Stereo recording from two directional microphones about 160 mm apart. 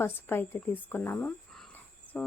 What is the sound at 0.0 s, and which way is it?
A woman's voice, 15° left (ahead or behind).